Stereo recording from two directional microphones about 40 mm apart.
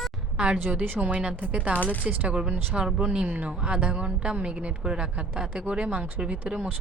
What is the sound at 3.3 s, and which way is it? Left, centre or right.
A woman's voice, right.